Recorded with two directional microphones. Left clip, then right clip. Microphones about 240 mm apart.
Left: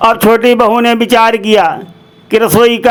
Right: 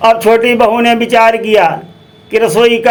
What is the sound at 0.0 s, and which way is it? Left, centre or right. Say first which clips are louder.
A man's voice: even; left.